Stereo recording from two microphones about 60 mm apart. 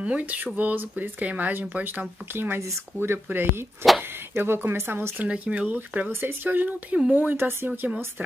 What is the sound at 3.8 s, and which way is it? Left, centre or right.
Speech, centre.